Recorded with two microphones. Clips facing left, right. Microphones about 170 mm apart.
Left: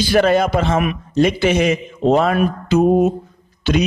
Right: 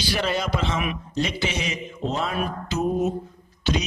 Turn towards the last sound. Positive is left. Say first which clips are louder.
# left 8 dB
turn(degrees=60)  # may be behind; listen again after turning